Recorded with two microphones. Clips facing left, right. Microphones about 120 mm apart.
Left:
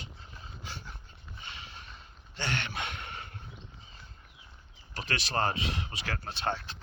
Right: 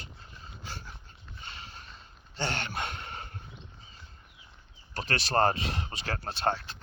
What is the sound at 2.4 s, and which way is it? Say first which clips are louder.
Speech: right 2 dB; 35° right (ahead or behind).